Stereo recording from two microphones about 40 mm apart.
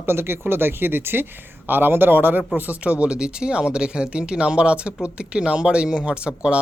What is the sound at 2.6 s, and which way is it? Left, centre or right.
Speech, right.